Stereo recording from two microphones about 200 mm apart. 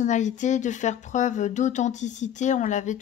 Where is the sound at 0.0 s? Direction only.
35° left (ahead or behind).